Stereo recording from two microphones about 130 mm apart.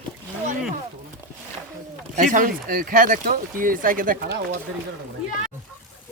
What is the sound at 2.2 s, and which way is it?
Speech, 85° right.